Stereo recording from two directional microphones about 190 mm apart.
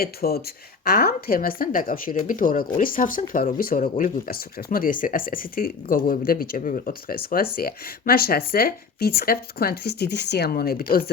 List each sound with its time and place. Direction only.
0.0 s a woman's voice: 55° left (ahead or behind)